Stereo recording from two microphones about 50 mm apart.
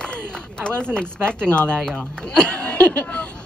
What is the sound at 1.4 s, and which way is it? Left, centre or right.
A woman's voice, left.